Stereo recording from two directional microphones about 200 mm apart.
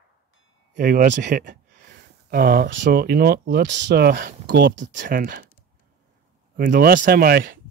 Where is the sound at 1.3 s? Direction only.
40° right (ahead or behind).